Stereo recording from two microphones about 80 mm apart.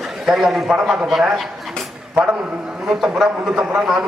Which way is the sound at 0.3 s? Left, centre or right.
Centre.